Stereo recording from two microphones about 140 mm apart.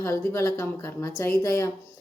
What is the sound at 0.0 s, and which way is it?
A woman's voice, 20° left (ahead or behind).